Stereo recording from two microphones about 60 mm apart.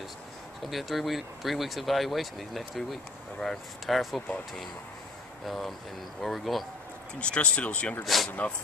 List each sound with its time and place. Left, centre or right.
0.7 s speech: centre
5.5 s speech: centre
7.2 s speech: centre
8.0 s speech: centre
8.3 s speech: left